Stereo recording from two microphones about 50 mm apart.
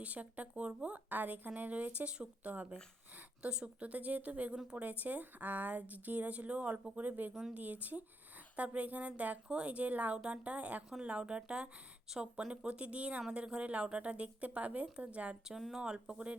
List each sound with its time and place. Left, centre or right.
0.0 s speech: right
3.4 s speech: centre
3.8 s speech: right
15.8 s speech: centre